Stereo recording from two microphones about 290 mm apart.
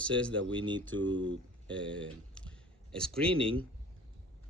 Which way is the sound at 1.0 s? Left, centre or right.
Right.